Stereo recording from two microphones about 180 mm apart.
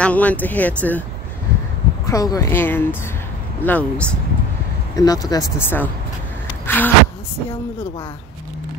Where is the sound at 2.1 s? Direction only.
20° left (ahead or behind).